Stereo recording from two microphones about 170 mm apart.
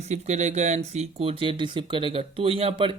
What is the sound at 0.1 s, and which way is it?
A man's voice, 40° right (ahead or behind).